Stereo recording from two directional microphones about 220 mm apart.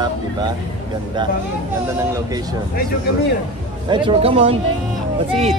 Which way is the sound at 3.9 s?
25° right (ahead or behind).